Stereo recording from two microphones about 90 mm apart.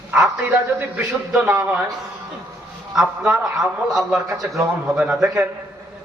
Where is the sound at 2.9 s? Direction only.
5° right (ahead or behind).